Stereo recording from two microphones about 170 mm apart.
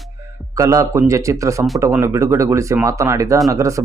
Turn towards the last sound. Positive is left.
turn(degrees=-20)  # may be behind; listen again after turning